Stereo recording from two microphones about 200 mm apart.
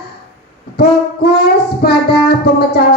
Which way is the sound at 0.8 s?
55° left (ahead or behind).